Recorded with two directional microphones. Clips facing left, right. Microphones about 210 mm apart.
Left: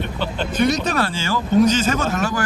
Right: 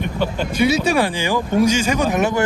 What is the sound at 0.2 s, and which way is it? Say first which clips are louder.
Speech: right 1 dB; 10° right (ahead or behind).